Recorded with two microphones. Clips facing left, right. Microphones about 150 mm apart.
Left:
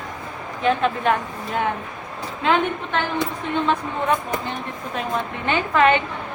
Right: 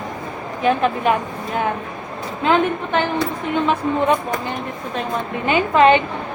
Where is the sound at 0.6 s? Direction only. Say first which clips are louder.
Right 2 dB; 5° right (ahead or behind).